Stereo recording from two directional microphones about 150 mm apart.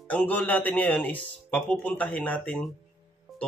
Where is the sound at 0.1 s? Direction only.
10° left (ahead or behind).